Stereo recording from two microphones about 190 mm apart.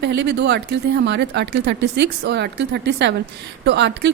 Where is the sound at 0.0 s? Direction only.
60° right (ahead or behind).